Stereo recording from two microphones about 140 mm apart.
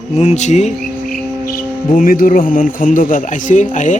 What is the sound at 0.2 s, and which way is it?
Speech, 50° left (ahead or behind).